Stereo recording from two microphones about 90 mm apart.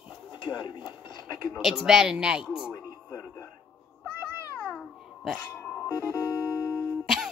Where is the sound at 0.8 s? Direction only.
50° left (ahead or behind).